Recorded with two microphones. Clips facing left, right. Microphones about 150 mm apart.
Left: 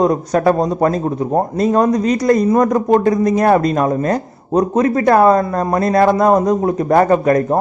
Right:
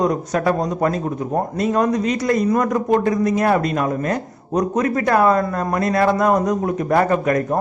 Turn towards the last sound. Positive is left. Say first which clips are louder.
# left 5 dB
turn(degrees=35)  # may be behind; listen again after turning